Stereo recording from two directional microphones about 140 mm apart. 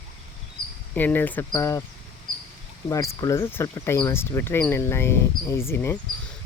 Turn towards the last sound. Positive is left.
turn(degrees=20)  # may be behind; listen again after turning